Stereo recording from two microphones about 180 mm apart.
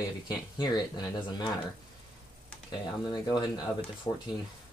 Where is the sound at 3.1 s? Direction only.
25° left (ahead or behind).